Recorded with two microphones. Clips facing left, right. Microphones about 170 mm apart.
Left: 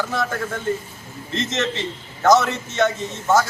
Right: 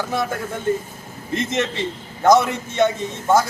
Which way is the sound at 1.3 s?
15° right (ahead or behind).